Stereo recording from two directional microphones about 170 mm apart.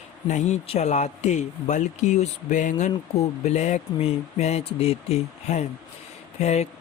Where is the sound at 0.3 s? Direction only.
40° left (ahead or behind).